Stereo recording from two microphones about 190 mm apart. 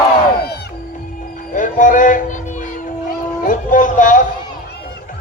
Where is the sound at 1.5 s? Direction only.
45° left (ahead or behind).